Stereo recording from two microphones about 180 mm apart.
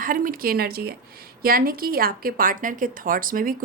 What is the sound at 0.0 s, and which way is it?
A woman's voice, 50° right (ahead or behind).